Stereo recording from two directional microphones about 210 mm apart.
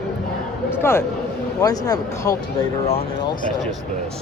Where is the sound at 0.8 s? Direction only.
10° left (ahead or behind).